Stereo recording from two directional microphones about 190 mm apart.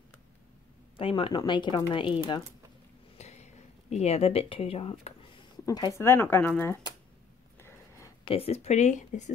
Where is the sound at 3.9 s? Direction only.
35° left (ahead or behind).